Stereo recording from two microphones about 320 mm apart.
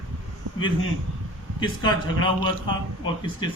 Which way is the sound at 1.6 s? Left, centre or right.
Centre.